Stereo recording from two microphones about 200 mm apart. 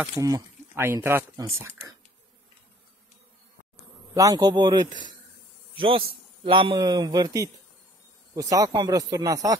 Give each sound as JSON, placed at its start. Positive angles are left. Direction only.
{"t": 0.2, "sound": "speech", "side_deg": -15}
{"t": 4.1, "sound": "a man's voice", "side_deg": -15}